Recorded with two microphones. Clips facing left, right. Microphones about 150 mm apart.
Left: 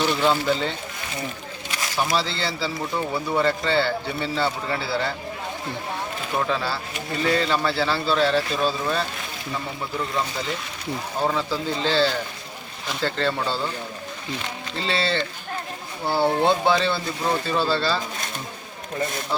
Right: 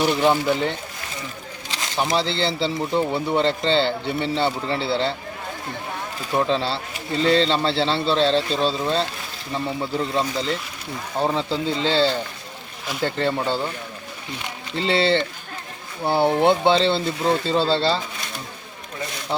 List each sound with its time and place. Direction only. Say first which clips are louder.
0.0 s speech: right 2 dB; 15° right (ahead or behind)
6.5 s speech: right 3 dB; 25° right (ahead or behind)
11.2 s speech: right 3 dB; 20° right (ahead or behind)